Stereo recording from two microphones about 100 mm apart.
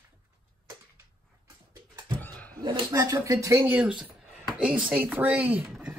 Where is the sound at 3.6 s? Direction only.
15° right (ahead or behind).